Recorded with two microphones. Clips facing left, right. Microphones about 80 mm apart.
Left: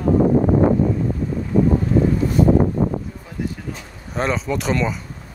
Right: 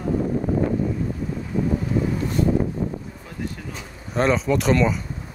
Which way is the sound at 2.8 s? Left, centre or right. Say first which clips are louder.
Left 6 dB; left.